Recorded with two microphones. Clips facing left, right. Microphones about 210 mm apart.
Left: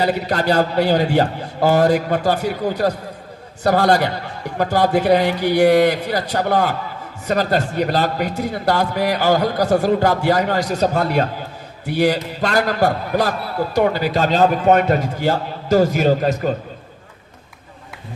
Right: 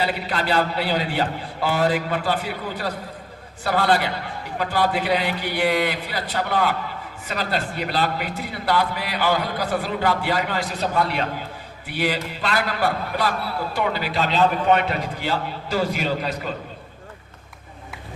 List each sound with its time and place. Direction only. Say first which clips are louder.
0.0 s a man's voice: left 6 dB; 45° left (ahead or behind)